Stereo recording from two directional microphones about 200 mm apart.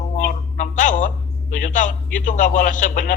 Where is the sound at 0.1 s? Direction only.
40° left (ahead or behind).